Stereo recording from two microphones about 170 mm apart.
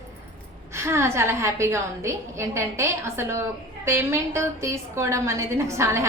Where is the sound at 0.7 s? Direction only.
15° right (ahead or behind).